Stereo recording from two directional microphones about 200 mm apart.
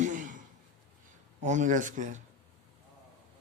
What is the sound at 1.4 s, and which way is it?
Speech, 35° right (ahead or behind).